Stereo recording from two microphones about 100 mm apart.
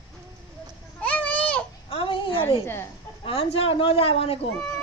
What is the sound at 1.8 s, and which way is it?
Speech, 70° left (ahead or behind).